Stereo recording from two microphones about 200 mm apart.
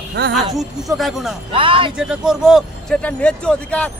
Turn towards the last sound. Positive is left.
turn(degrees=5)  # may be behind; listen again after turning